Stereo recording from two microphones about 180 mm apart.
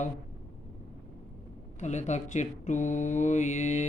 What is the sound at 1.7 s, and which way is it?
Speech, 40° left (ahead or behind).